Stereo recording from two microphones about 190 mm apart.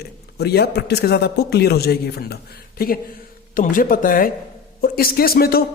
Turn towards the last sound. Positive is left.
turn(degrees=50)  # may be behind; listen again after turning